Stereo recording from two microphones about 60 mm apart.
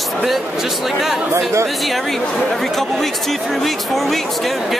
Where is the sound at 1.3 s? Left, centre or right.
Right.